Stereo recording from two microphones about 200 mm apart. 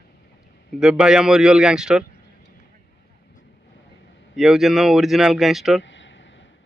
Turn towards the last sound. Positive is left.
turn(degrees=65)  # may be behind; listen again after turning